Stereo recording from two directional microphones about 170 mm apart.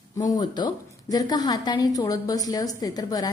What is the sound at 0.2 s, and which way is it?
A woman's voice, 25° left (ahead or behind).